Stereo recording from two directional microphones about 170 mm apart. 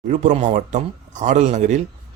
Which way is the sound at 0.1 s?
45° right (ahead or behind).